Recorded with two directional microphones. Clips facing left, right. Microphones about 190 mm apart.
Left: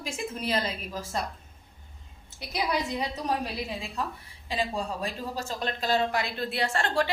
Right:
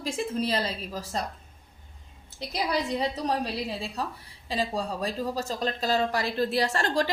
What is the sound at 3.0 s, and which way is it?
A woman's voice, 30° right (ahead or behind).